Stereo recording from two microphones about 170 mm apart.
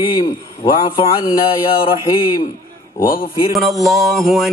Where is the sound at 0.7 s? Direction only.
30° left (ahead or behind).